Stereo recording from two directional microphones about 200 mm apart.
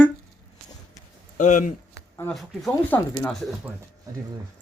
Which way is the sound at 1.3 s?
40° left (ahead or behind).